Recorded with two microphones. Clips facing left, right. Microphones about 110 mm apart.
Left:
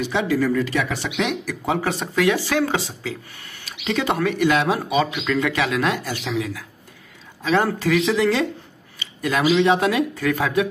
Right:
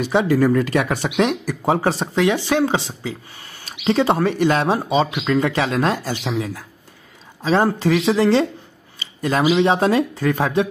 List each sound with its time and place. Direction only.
0.0 s speech: 45° right (ahead or behind)
9.0 s a sound: 35° right (ahead or behind)
9.5 s speech: 25° right (ahead or behind)